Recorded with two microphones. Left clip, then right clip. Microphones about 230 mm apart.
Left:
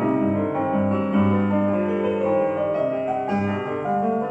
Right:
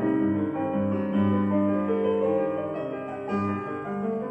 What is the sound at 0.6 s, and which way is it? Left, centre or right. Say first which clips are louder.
Music: left 5 dB; left.